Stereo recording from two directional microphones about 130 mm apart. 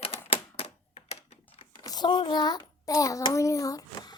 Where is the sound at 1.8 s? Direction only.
35° left (ahead or behind).